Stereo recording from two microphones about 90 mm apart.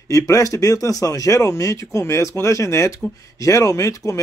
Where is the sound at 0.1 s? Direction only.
35° left (ahead or behind).